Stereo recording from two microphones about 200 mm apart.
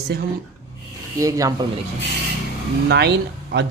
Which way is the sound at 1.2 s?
15° right (ahead or behind).